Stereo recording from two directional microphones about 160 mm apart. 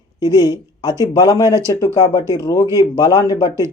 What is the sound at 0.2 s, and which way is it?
Speech, 25° left (ahead or behind).